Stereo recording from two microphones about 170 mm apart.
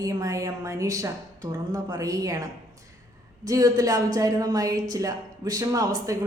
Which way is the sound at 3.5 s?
20° right (ahead or behind).